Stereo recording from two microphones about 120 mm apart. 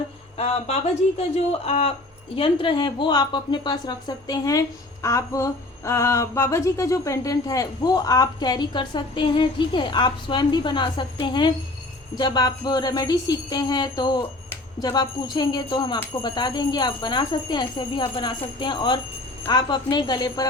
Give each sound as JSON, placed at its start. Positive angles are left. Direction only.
{"t": 0.3, "sound": "speech", "side_deg": 60}
{"t": 2.3, "sound": "speech", "side_deg": 45}